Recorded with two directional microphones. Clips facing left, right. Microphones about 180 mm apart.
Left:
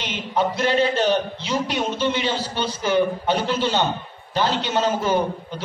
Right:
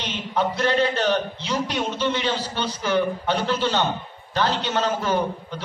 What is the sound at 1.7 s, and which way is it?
A man's voice, 15° left (ahead or behind).